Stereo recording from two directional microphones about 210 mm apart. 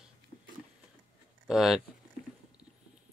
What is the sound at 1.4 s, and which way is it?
Speech, centre (ahead or behind).